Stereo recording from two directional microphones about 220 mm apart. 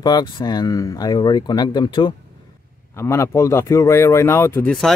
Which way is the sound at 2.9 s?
10° left (ahead or behind).